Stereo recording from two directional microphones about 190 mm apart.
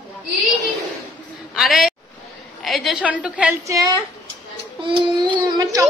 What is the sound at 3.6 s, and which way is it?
A child's voice, 20° right (ahead or behind).